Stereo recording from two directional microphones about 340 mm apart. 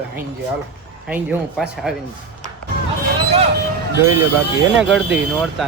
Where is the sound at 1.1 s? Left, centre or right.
Centre.